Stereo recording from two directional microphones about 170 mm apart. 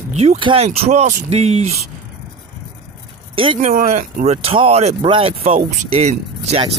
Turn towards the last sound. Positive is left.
turn(degrees=-40)  # may be behind; listen again after turning